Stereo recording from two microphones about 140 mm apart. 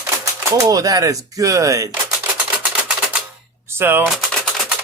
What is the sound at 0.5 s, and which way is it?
Speech, 25° right (ahead or behind).